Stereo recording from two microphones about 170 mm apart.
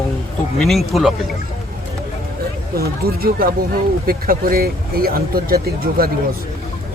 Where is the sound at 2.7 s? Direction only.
60° right (ahead or behind).